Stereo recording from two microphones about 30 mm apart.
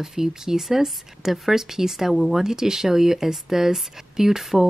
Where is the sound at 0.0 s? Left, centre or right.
Centre.